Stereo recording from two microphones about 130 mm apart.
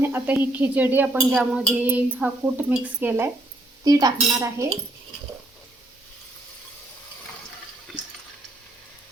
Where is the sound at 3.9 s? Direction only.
30° right (ahead or behind).